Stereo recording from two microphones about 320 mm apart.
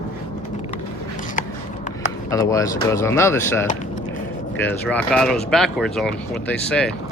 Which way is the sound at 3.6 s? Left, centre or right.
Left.